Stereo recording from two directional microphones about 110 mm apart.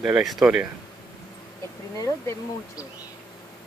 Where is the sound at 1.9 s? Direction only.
30° left (ahead or behind).